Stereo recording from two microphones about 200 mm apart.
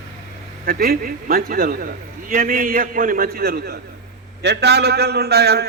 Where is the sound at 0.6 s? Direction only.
50° right (ahead or behind).